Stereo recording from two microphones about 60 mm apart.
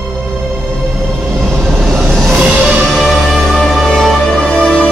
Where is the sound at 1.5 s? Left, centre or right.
Centre.